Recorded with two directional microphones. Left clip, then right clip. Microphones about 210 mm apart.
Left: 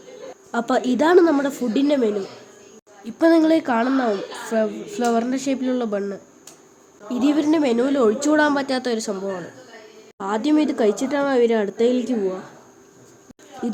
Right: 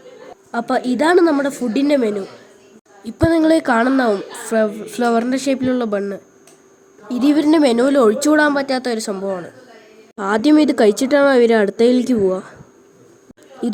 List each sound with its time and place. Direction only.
0.5 s a woman's voice: 5° right (ahead or behind); by 12.4 s 25° right (ahead or behind)